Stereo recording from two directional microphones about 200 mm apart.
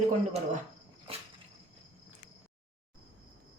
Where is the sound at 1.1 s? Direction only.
30° right (ahead or behind).